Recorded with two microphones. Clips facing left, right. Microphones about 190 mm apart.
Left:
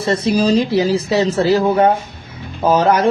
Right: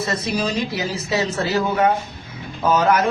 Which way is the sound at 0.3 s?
35° left (ahead or behind).